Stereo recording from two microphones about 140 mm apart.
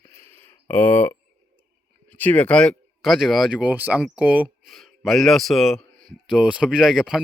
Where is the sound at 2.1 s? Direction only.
10° left (ahead or behind); by 4.7 s 10° right (ahead or behind).